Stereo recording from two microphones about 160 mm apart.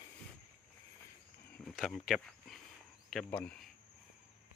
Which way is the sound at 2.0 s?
Centre (ahead or behind).